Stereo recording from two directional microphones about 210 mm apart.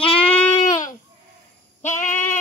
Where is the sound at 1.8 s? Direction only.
35° left (ahead or behind).